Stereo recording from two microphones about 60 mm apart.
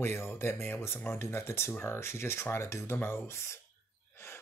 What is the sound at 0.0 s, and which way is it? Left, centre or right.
Speech, left.